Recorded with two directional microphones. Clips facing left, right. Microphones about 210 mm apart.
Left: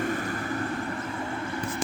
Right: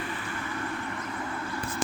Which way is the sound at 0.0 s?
45° left (ahead or behind).